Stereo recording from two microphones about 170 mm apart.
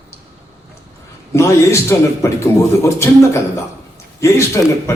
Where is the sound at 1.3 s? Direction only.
15° left (ahead or behind).